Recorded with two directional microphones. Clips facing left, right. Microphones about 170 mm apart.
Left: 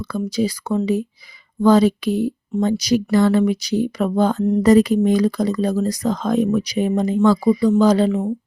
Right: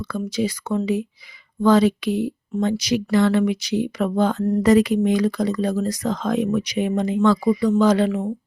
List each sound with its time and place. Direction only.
0.0 s speech: 35° left (ahead or behind)